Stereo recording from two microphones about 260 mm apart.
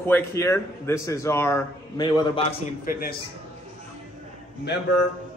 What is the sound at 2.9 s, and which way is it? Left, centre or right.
Speech, left.